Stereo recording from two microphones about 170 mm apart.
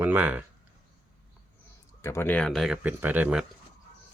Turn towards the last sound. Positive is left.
turn(degrees=-5)  # may be behind; listen again after turning